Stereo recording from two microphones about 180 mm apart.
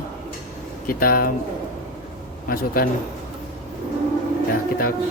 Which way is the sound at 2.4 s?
55° left (ahead or behind).